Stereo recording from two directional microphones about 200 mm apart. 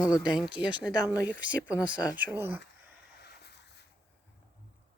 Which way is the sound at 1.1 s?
15° left (ahead or behind).